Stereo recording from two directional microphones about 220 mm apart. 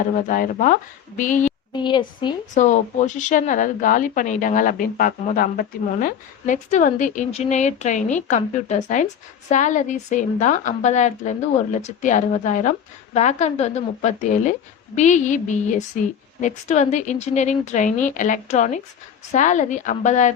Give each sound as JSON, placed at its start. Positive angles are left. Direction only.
{"t": 0.3, "sound": "a woman's voice", "side_deg": 40}
{"t": 1.7, "sound": "a woman's voice", "side_deg": 20}
{"t": 2.6, "sound": "a woman's voice", "side_deg": 35}